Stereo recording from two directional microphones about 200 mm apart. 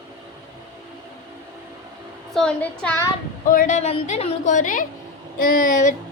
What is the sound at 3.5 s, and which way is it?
Speech, 40° left (ahead or behind).